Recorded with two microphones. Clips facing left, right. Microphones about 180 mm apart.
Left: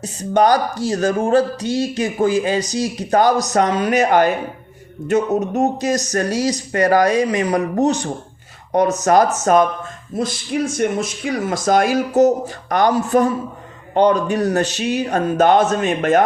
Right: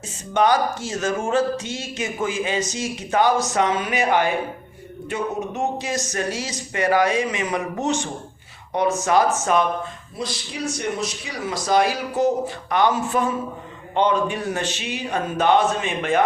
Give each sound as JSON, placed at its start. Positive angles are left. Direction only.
{"t": 0.3, "sound": "speech", "side_deg": 40}